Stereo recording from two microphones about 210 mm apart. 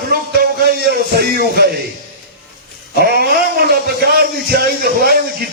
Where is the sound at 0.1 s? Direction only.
45° right (ahead or behind).